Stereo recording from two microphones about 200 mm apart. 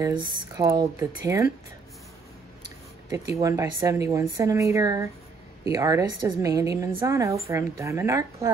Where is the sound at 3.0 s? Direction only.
15° right (ahead or behind).